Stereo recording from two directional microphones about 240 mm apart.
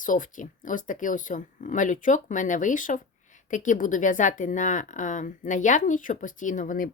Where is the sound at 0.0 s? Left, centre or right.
Left.